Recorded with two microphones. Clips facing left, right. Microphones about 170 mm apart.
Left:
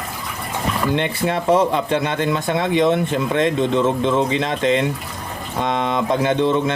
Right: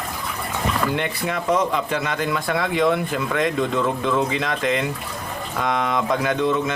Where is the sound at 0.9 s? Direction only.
25° left (ahead or behind).